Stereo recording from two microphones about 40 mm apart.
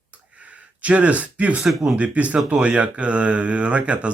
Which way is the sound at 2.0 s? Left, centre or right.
Right.